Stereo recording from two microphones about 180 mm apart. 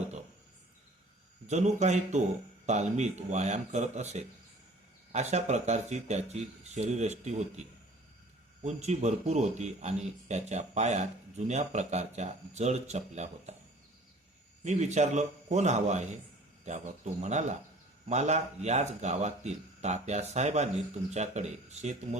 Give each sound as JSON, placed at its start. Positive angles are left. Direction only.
{"t": 1.5, "sound": "speech", "side_deg": -40}
{"t": 8.6, "sound": "speech", "side_deg": -40}
{"t": 14.6, "sound": "speech", "side_deg": -40}